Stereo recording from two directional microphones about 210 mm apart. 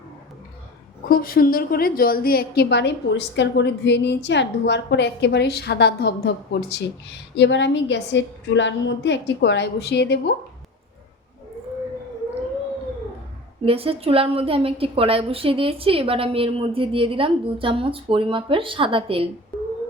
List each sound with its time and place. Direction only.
1.1 s a woman's voice: 45° left (ahead or behind)
13.7 s a woman's voice: 25° right (ahead or behind)